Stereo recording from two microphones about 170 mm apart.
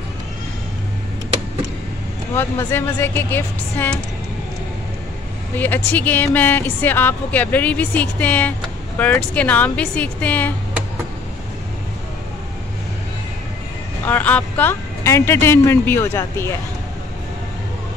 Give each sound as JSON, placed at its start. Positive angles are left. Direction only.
{"t": 2.3, "sound": "speech", "side_deg": 15}
{"t": 5.9, "sound": "speech", "side_deg": 10}
{"t": 14.0, "sound": "speech", "side_deg": 10}